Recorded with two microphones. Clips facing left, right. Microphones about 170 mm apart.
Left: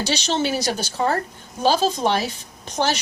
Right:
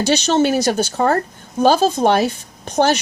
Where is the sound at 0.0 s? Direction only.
50° right (ahead or behind).